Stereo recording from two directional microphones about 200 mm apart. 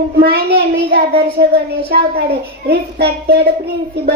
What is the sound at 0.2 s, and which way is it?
Child singing, 50° right (ahead or behind).